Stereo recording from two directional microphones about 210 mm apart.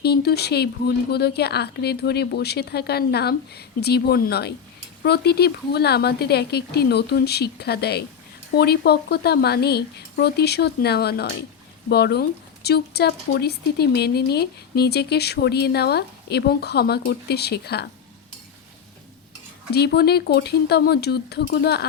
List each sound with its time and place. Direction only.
0.0 s speech: 50° left (ahead or behind)
19.7 s speech: 50° left (ahead or behind)